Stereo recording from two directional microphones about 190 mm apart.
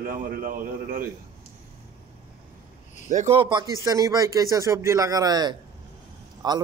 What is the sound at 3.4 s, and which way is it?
A man's voice, 25° right (ahead or behind).